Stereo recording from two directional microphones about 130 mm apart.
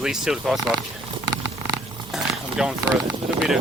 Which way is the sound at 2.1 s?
5° right (ahead or behind).